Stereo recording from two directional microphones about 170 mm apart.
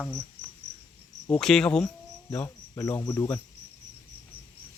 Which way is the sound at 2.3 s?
15° left (ahead or behind).